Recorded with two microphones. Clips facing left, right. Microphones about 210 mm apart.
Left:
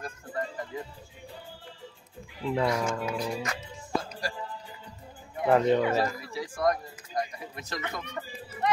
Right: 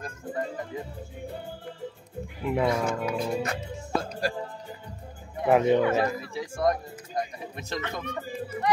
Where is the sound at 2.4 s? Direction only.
10° right (ahead or behind).